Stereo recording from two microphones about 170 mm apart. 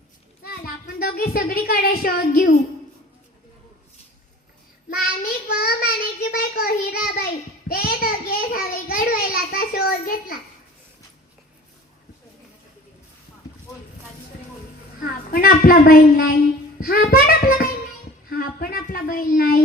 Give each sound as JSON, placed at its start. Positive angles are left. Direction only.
{"t": 0.4, "sound": "a child's voice", "side_deg": 65}
{"t": 4.9, "sound": "child singing", "side_deg": 60}
{"t": 7.7, "sound": "a sound", "side_deg": 60}
{"t": 15.0, "sound": "a woman's voice", "side_deg": 55}
{"t": 16.8, "sound": "a sound", "side_deg": 60}
{"t": 18.3, "sound": "speech", "side_deg": 60}